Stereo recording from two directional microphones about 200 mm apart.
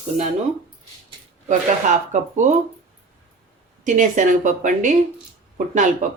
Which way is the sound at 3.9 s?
40° right (ahead or behind).